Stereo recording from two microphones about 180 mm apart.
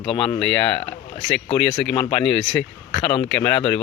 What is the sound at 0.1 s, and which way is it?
Speech, 30° left (ahead or behind).